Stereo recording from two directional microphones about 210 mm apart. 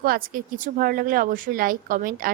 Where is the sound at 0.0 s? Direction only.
45° right (ahead or behind).